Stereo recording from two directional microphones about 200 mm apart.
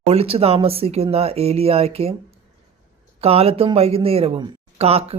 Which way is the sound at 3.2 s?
30° right (ahead or behind).